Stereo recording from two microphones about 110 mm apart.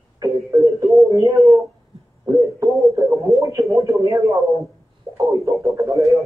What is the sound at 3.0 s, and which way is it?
Speech, 30° right (ahead or behind).